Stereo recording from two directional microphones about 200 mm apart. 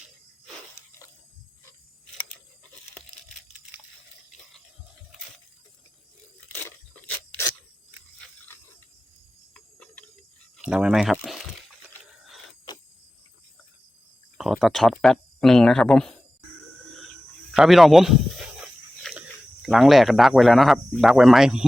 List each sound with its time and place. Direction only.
6.5 s a sound: 10° left (ahead or behind)
9.6 s cricket: 5° left (ahead or behind)
10.6 s a sound: 5° right (ahead or behind)
12.7 s cricket: 20° left (ahead or behind)
14.3 s speech: centre (ahead or behind)
17.5 s snake: centre (ahead or behind)
19.0 s speech: 5° right (ahead or behind)